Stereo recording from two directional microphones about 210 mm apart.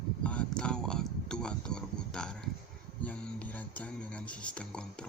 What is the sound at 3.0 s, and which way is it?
Speech, 5° left (ahead or behind).